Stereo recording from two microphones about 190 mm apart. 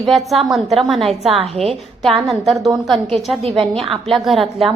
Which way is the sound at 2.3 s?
Centre (ahead or behind).